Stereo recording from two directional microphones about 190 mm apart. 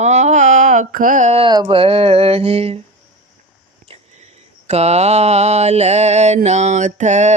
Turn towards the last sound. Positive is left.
turn(degrees=-40)  # may be behind; listen again after turning